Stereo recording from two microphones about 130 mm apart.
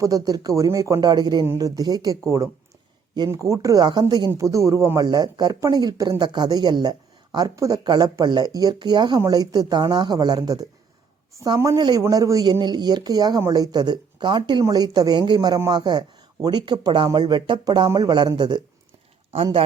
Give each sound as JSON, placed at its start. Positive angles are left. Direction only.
{"t": 0.0, "sound": "speech", "side_deg": -30}